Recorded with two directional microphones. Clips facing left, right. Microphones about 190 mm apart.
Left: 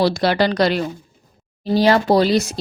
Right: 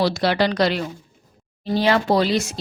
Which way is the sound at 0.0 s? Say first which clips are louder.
Left 2 dB; 40° left (ahead or behind).